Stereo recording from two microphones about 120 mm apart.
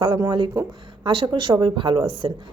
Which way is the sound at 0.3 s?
40° right (ahead or behind).